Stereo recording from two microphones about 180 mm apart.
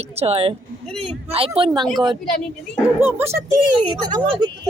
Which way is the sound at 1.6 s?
30° right (ahead or behind).